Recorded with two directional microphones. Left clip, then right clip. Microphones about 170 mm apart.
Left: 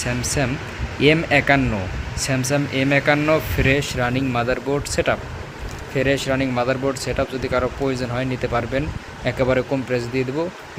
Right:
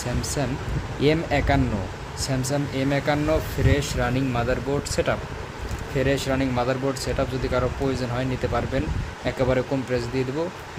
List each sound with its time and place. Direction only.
1.0 s speech: 5° left (ahead or behind)